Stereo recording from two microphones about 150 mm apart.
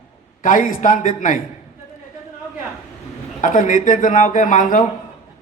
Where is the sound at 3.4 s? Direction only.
60° left (ahead or behind).